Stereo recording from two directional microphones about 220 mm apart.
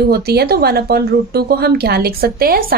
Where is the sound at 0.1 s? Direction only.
45° right (ahead or behind).